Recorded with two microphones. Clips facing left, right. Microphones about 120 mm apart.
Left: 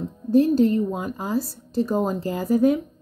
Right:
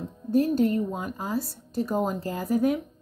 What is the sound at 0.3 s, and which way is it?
Speech, 25° left (ahead or behind).